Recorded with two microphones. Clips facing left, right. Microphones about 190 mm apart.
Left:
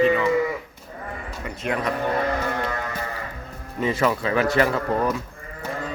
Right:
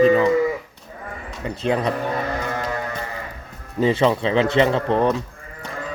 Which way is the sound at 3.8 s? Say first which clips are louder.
Right 4 dB; 30° right (ahead or behind).